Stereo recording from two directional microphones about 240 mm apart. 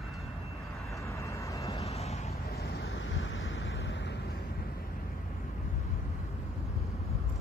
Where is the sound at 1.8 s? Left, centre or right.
Left.